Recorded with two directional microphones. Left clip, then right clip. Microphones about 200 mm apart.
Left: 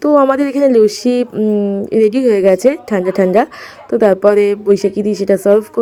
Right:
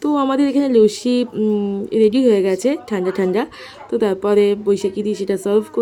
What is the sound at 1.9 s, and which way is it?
A woman's voice, 20° left (ahead or behind).